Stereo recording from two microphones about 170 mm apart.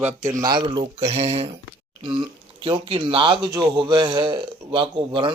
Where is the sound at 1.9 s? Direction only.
30° right (ahead or behind).